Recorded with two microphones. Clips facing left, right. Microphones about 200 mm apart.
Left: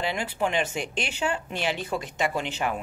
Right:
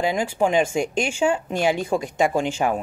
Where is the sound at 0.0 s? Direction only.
45° right (ahead or behind).